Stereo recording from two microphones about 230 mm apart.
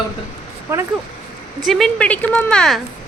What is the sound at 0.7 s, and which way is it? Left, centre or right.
Speech, centre.